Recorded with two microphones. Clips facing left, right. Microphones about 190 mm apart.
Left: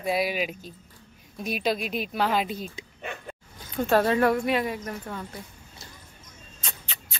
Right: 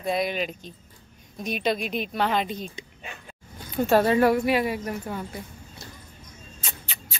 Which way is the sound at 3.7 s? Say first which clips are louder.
Right 2 dB; 5° right (ahead or behind).